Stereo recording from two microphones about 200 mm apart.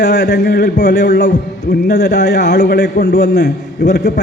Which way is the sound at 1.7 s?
60° left (ahead or behind).